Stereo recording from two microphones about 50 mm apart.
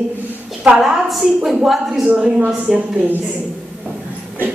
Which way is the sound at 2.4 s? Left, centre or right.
Right.